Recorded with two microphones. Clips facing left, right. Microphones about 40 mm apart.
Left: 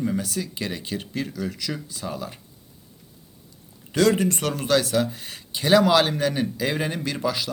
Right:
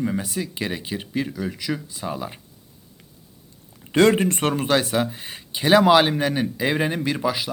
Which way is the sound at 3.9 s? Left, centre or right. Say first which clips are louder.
Right 3 dB; right.